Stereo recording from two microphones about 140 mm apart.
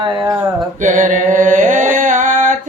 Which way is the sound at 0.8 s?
65° right (ahead or behind).